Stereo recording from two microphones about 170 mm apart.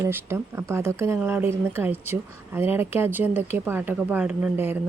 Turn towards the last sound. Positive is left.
turn(degrees=-10)  # may be behind; listen again after turning